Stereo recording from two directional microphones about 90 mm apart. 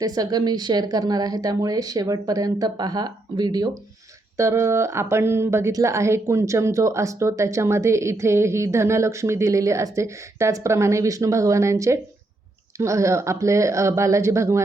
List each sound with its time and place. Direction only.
0.0 s a woman's voice: 45° right (ahead or behind)
4.4 s a woman's voice: 35° right (ahead or behind)